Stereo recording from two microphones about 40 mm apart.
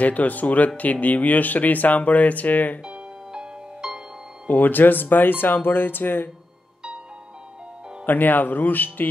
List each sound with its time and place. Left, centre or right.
0.0 s speech: left
2.8 s music: right
4.5 s speech: left
8.0 s speech: left